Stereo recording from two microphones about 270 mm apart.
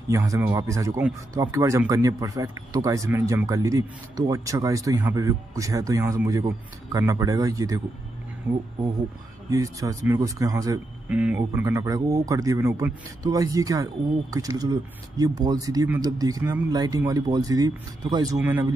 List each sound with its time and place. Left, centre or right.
0.1 s speech: centre